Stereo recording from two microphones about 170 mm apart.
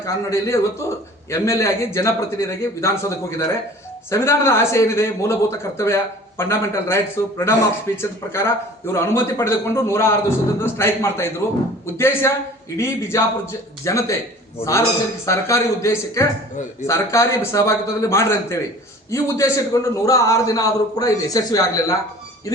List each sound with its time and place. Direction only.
0.0 s a man's voice: 15° left (ahead or behind)